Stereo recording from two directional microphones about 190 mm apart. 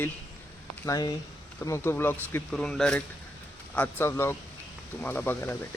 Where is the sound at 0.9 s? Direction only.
20° left (ahead or behind).